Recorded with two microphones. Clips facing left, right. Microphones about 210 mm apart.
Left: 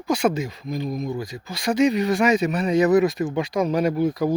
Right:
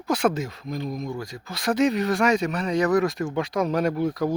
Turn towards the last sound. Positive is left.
turn(degrees=5)  # may be behind; listen again after turning